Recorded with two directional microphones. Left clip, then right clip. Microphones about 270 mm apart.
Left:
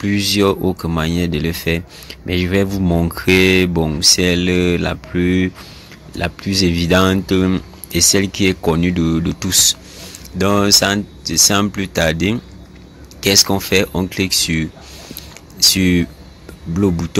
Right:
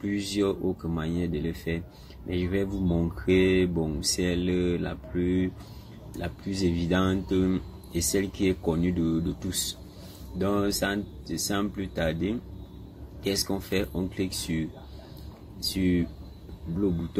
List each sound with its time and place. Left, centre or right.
0.0 s speech: left
15.7 s speech: left